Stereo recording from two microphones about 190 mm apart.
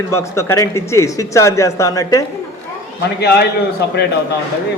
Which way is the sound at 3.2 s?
60° left (ahead or behind).